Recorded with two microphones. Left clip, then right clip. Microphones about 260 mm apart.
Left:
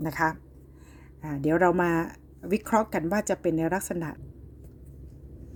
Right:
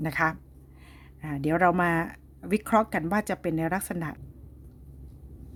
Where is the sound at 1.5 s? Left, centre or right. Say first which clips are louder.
Even; right.